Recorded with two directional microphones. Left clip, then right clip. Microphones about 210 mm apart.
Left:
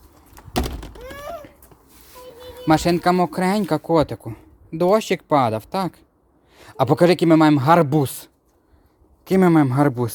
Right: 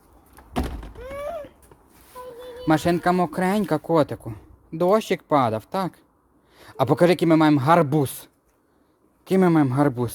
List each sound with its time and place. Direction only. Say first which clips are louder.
0.3 s door: left 4 dB; 40° left (ahead or behind)
2.6 s speech: left 3 dB; 10° left (ahead or behind)